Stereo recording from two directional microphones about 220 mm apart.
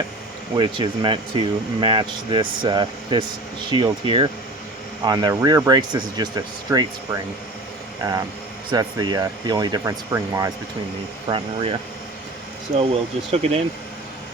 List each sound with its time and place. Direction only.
0.5 s speech: 20° right (ahead or behind)
8.7 s speech: 20° right (ahead or behind)
12.9 s speech: 30° right (ahead or behind)